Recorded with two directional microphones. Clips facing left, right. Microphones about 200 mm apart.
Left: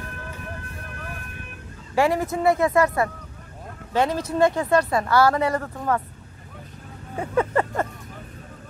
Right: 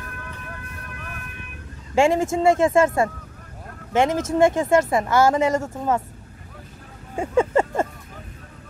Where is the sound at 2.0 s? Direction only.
25° right (ahead or behind).